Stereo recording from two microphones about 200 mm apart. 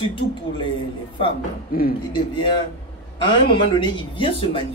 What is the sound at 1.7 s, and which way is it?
Speech, 45° left (ahead or behind).